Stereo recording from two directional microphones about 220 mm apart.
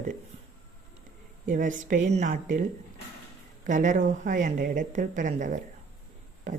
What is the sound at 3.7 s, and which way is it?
Speech, 35° right (ahead or behind).